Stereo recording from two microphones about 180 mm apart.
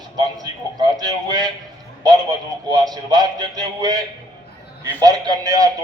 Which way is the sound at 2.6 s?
20° right (ahead or behind).